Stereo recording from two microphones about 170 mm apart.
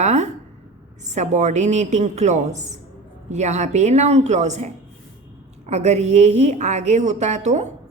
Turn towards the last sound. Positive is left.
turn(degrees=-45)  # may be behind; listen again after turning